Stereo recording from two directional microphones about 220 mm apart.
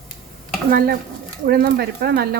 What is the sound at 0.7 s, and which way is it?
Speech, 45° right (ahead or behind).